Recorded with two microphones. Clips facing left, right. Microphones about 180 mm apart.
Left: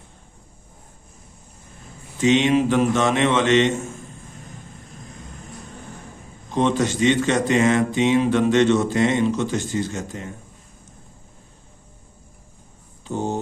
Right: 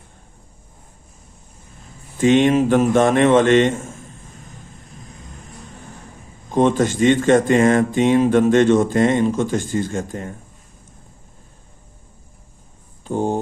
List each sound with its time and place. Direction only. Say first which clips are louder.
2.1 s speech: right 3 dB; 50° right (ahead or behind)
6.5 s speech: right 4 dB; 50° right (ahead or behind)
13.1 s a sound: right 4 dB; 50° right (ahead or behind)